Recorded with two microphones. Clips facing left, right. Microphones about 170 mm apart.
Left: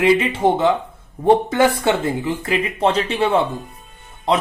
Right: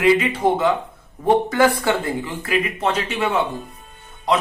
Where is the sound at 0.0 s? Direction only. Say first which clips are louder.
Left 1 dB; 25° left (ahead or behind).